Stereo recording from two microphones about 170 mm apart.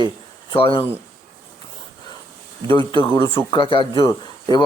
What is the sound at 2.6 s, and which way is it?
A man's voice, 30° left (ahead or behind).